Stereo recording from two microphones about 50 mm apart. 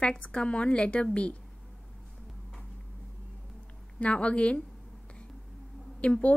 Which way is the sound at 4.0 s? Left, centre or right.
Left.